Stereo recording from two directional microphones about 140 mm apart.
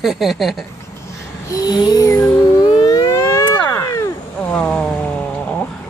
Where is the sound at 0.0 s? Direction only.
Centre (ahead or behind).